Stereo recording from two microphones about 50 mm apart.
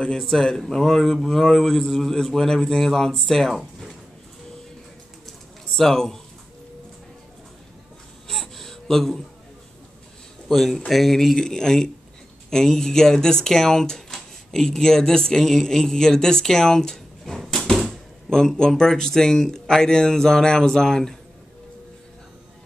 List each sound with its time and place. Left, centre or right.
0.2 s speech: centre
5.8 s speech: centre
8.3 s gasp: centre
10.5 s speech: centre